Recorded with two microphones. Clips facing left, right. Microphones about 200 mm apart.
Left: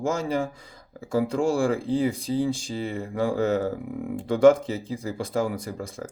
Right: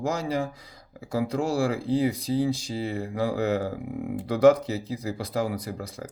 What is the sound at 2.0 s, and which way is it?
Speech, 25° left (ahead or behind).